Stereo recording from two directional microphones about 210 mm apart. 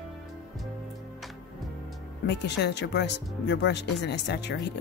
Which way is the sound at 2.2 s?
55° left (ahead or behind).